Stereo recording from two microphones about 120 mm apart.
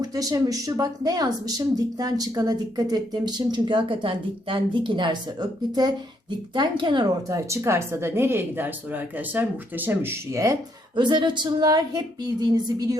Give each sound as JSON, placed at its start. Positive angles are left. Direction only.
{"t": 0.0, "sound": "speech", "side_deg": -30}
{"t": 10.9, "sound": "speech", "side_deg": -40}